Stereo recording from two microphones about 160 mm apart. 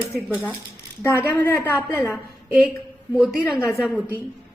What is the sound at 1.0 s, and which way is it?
A woman's voice, 15° left (ahead or behind).